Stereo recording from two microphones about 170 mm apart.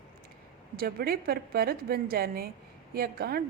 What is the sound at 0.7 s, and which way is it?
A woman's voice, 65° right (ahead or behind).